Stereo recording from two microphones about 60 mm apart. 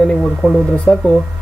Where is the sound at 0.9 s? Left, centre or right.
Centre.